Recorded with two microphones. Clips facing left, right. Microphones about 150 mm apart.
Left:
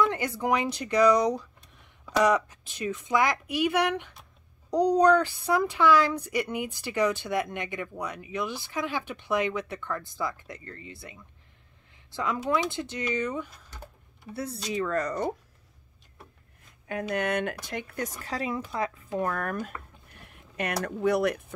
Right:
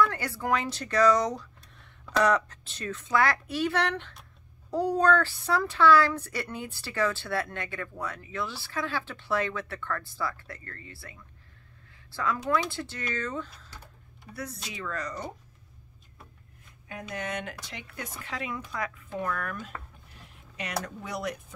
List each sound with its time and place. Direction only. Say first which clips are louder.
0.0 s a woman's voice: left 1 dB; 20° left (ahead or behind)
14.3 s speech: left 4 dB; 30° left (ahead or behind)
14.7 s speech: left 10 dB; 45° left (ahead or behind)
16.8 s speech: left 7 dB; 65° left (ahead or behind); by 19.0 s 30° left (ahead or behind)
19.1 s speech: left 4 dB; 40° left (ahead or behind)
20.2 s speech: left 6 dB; 55° left (ahead or behind)